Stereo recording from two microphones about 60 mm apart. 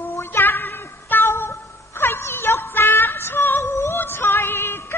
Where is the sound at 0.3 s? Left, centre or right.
Left.